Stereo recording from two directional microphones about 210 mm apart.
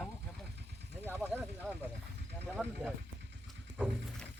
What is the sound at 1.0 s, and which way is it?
Speech, 10° right (ahead or behind).